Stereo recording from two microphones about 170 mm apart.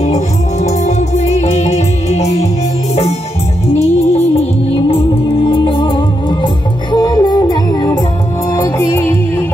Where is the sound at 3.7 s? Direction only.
40° left (ahead or behind).